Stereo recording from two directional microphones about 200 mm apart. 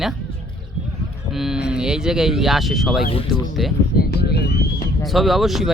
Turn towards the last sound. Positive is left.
turn(degrees=0)  # may be behind; listen again after turning